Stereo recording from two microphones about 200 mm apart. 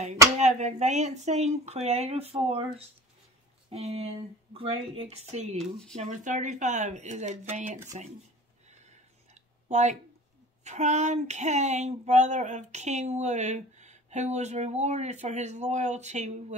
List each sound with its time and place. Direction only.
0.4 s speech: 35° right (ahead or behind)
8.6 s a sound: 35° right (ahead or behind)
10.6 s speech: 35° right (ahead or behind)